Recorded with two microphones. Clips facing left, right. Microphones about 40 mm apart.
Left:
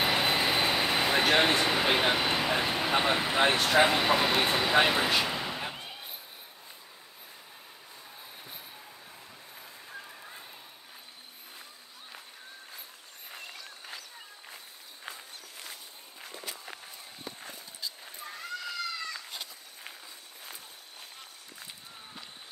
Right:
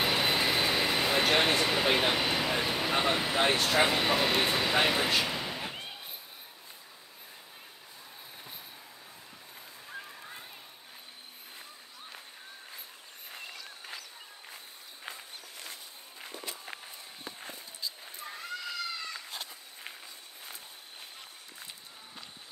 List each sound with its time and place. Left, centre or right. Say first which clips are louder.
0.0 s vehicle: left 1 dB; centre
1.6 s speech: left 1 dB; centre
2.5 s a sound: left 2 dB; left
3.6 s speech: left 3 dB; left
4.3 s speech: left 1 dB; centre
4.7 s vehicle: left 3 dB; centre
13.3 s a sound: even; centre
16.6 s walk: right 1 dB; centre
18.0 s run: even; centre